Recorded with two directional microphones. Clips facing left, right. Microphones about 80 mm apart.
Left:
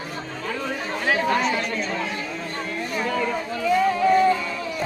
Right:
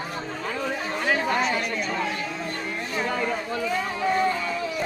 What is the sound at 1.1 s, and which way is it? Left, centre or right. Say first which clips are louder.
Chatter: left 4 dB; centre.